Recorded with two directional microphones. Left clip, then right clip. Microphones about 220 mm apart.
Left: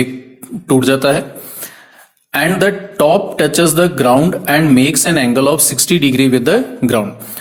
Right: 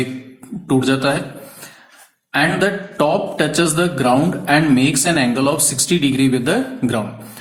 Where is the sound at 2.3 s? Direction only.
35° left (ahead or behind).